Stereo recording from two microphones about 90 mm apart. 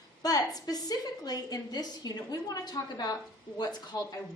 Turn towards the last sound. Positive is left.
turn(degrees=50)  # may be behind; listen again after turning